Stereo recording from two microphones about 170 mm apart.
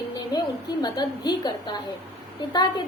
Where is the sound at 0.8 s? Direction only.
25° left (ahead or behind).